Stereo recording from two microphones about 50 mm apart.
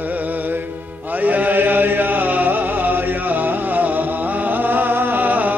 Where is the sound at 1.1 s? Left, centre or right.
Right.